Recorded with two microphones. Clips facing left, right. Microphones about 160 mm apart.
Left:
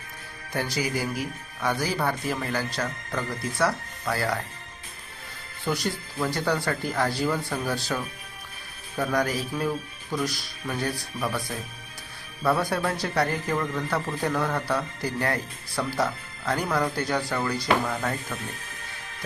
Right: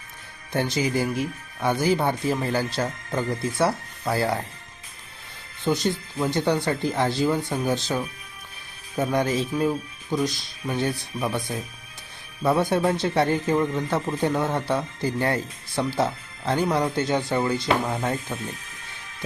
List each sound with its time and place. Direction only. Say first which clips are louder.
0.5 s speech: right 4 dB; 25° right (ahead or behind)
5.6 s speech: right 5 dB; 20° right (ahead or behind)